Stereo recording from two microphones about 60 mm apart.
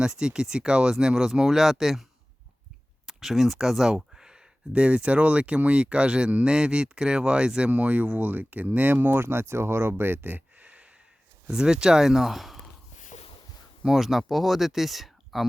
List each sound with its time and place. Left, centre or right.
0.0 s speech: centre
3.1 s speech: centre; by 9.9 s right
10.0 s speech: right
11.4 s speech: centre
13.8 s speech: centre